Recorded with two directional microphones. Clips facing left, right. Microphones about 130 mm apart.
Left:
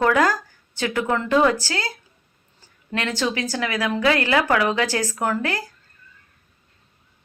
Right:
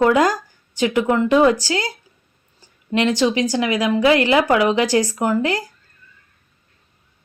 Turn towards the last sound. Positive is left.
turn(degrees=-15)  # may be behind; listen again after turning